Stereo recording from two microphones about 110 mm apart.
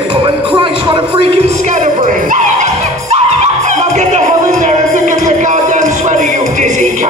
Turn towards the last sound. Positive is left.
turn(degrees=-90)